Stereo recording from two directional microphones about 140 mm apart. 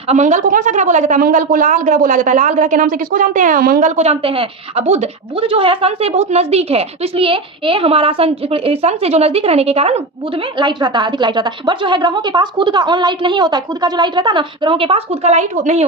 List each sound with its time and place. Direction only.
0.1 s a woman's voice: 60° right (ahead or behind)
10.6 s a woman's voice: 30° right (ahead or behind); by 15.9 s 55° right (ahead or behind)